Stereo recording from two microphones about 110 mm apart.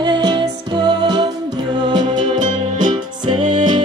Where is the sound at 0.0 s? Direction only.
40° right (ahead or behind).